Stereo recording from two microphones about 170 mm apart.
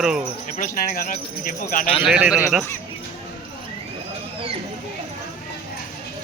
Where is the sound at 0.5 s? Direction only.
50° left (ahead or behind).